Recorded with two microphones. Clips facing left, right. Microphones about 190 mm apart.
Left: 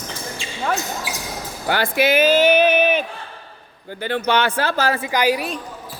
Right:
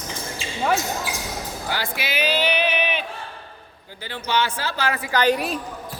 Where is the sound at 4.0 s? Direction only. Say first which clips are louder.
Left 5 dB; 60° left (ahead or behind).